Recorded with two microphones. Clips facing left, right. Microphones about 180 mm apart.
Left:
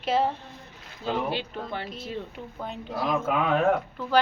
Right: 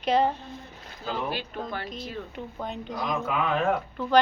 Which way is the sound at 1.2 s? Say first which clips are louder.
Left 1 dB; 25° left (ahead or behind).